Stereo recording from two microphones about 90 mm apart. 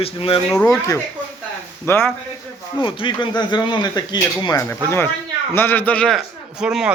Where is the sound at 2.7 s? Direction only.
65° left (ahead or behind).